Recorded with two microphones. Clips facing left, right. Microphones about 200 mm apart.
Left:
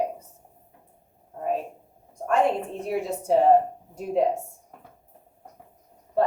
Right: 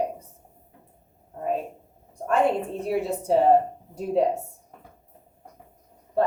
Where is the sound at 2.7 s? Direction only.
35° right (ahead or behind).